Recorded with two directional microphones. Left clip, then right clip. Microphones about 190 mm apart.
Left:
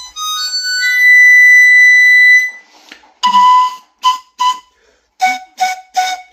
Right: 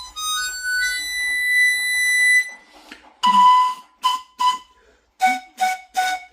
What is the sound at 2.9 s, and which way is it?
Whistle, 25° right (ahead or behind).